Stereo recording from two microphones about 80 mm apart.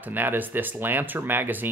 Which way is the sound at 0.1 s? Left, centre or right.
Right.